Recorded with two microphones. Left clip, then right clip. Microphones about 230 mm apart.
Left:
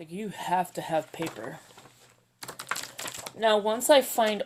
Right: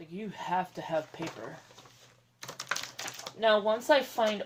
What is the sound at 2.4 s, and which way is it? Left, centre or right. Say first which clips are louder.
Typing: left 1 dB; centre.